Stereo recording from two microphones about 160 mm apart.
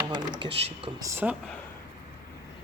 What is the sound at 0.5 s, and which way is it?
Speech, 40° right (ahead or behind).